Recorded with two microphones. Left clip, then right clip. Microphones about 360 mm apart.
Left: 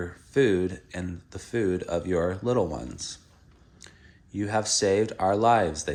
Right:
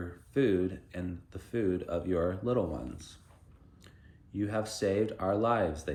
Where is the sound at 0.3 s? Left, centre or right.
Centre.